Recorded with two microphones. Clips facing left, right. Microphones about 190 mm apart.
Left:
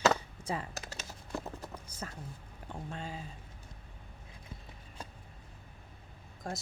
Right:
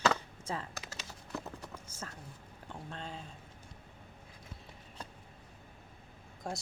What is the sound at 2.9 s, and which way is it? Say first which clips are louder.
Speech: left 2 dB; 10° left (ahead or behind).